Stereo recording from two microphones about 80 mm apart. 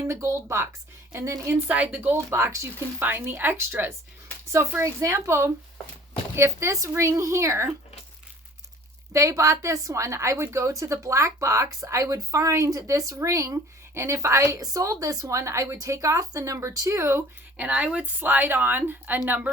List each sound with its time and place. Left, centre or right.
0.1 s a woman's voice: right
1.6 s a woman's voice: right
2.1 s a woman's voice: right
4.8 s a woman's voice: right
9.1 s a woman's voice: right
17.0 s a woman's voice: right
17.6 s a woman's voice: centre